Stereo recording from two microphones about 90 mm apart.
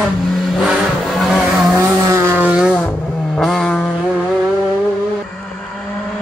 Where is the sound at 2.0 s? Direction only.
35° right (ahead or behind).